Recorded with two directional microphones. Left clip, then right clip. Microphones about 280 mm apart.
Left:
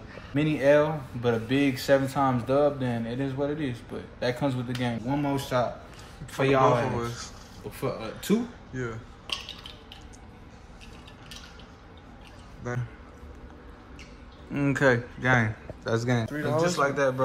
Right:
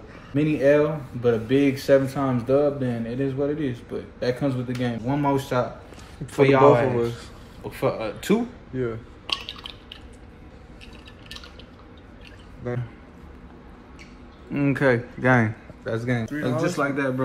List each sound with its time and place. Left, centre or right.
0.4 s speech: centre
5.0 s speech: centre
5.4 s speech: centre
14.5 s a man's voice: centre
15.9 s a man's voice: centre
16.5 s speech: centre